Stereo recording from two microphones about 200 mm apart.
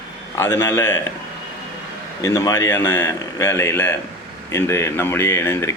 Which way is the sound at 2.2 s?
15° left (ahead or behind).